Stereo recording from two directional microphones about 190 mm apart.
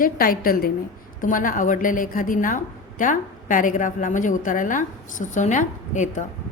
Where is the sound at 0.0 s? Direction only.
50° left (ahead or behind).